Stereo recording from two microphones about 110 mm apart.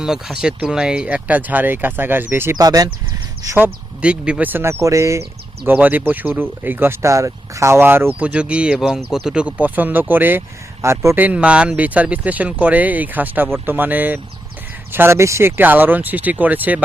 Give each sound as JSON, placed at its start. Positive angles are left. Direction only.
{"t": 0.0, "sound": "speech", "side_deg": -5}
{"t": 2.6, "sound": "speech", "side_deg": -35}
{"t": 3.4, "sound": "speech", "side_deg": -25}
{"t": 4.0, "sound": "speech", "side_deg": -10}
{"t": 5.6, "sound": "speech", "side_deg": -15}